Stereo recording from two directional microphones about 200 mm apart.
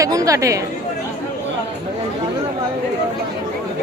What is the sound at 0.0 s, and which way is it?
Speech, 15° right (ahead or behind).